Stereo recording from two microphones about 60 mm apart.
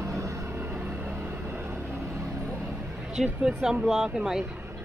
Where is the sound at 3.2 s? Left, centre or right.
Centre.